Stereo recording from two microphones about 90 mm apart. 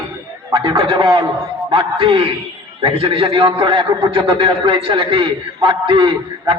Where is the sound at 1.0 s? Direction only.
50° right (ahead or behind).